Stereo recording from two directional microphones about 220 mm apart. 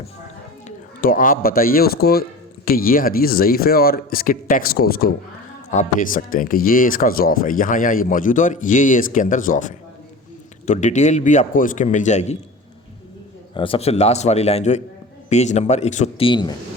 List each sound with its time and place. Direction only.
1.0 s speech: 40° left (ahead or behind)
13.5 s a man's voice: 25° left (ahead or behind)